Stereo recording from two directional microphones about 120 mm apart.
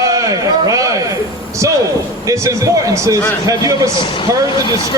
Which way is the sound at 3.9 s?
45° left (ahead or behind).